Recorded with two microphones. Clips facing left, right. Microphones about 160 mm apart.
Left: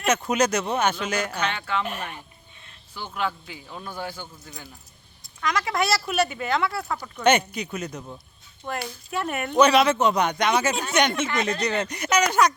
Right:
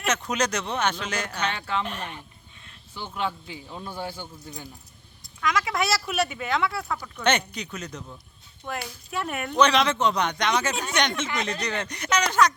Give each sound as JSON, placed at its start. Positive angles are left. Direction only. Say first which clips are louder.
{"t": 0.0, "sound": "speech", "louder": "left 4 dB", "side_deg": 10}
{"t": 1.5, "sound": "speech", "louder": "left 1 dB", "side_deg": -30}
{"t": 1.8, "sound": "speech", "louder": "left 2 dB", "side_deg": 10}
{"t": 2.9, "sound": "speech", "louder": "left 1 dB", "side_deg": -25}
{"t": 5.4, "sound": "speech", "louder": "left 1 dB", "side_deg": 0}